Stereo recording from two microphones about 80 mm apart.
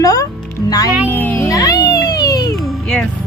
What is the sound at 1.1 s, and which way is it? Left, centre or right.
Music, left.